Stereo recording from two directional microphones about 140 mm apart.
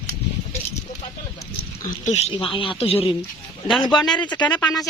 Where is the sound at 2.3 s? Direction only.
35° left (ahead or behind).